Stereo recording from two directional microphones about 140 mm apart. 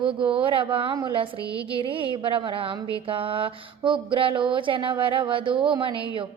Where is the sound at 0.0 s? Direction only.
35° right (ahead or behind).